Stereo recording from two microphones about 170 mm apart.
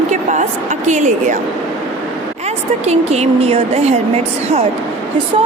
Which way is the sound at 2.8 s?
40° right (ahead or behind).